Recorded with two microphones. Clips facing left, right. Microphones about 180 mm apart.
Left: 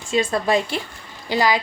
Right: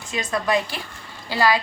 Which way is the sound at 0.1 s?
30° left (ahead or behind).